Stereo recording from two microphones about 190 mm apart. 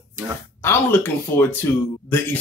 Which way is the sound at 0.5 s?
10° left (ahead or behind).